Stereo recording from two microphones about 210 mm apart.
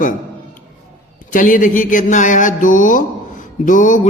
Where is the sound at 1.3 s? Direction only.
40° left (ahead or behind).